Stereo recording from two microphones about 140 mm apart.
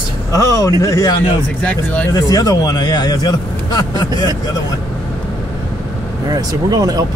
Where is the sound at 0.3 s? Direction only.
25° left (ahead or behind).